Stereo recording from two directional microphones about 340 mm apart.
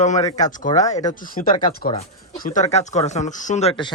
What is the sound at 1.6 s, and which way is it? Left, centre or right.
Speech, centre.